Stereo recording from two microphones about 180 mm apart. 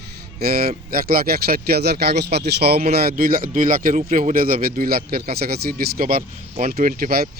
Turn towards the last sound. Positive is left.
turn(degrees=-55)  # may be behind; listen again after turning